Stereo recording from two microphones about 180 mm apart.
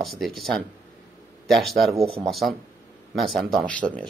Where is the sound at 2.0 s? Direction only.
30° right (ahead or behind).